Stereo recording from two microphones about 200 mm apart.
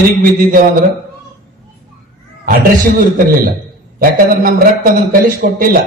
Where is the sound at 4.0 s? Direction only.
45° right (ahead or behind).